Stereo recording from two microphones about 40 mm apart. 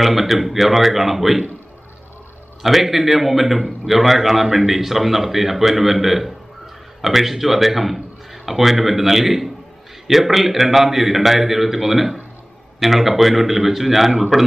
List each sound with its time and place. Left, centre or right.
0.0 s a man's voice: centre
2.6 s a man's voice: centre